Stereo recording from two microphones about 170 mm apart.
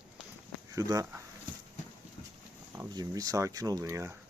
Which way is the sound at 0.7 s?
20° right (ahead or behind).